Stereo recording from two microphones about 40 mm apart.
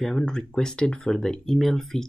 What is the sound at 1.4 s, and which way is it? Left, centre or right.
Speech, centre.